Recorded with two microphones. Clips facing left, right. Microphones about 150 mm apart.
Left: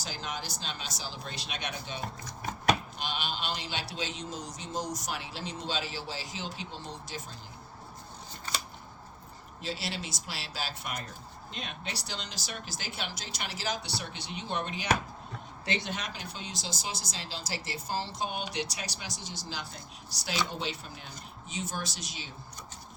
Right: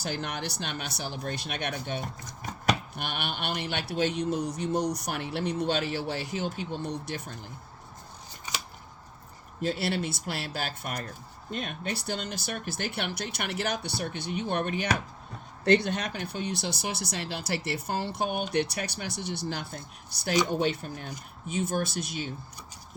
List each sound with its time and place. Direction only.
0.0 s speech: 60° right (ahead or behind)
8.5 s scissors: 15° right (ahead or behind)
9.6 s speech: 55° right (ahead or behind)